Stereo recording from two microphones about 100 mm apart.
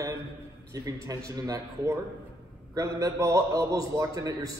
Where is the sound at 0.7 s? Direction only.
35° right (ahead or behind).